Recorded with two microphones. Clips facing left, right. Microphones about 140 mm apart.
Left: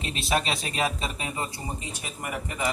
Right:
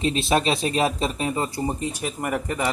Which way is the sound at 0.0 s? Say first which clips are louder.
Right 6 dB; 30° right (ahead or behind).